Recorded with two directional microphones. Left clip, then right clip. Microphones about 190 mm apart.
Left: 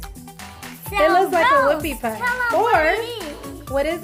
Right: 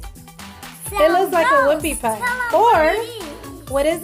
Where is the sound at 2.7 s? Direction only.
15° right (ahead or behind).